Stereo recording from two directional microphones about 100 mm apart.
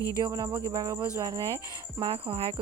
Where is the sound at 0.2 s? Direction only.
40° right (ahead or behind).